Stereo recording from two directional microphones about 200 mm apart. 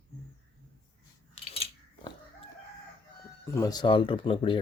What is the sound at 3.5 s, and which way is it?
Speech, 20° left (ahead or behind).